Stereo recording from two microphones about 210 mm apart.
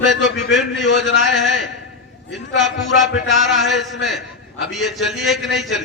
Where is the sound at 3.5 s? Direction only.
Centre (ahead or behind).